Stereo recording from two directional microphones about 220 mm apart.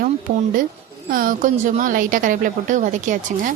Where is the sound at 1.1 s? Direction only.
40° right (ahead or behind).